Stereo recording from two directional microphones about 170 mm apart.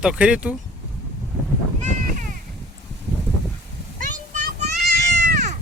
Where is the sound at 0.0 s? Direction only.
5° right (ahead or behind).